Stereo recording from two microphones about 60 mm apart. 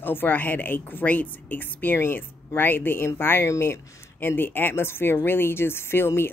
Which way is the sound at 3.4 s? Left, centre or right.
Left.